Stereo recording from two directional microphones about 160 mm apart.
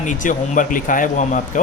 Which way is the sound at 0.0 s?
55° left (ahead or behind).